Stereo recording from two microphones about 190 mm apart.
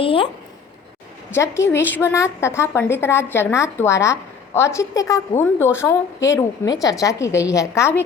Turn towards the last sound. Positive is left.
turn(degrees=15)  # may be behind; listen again after turning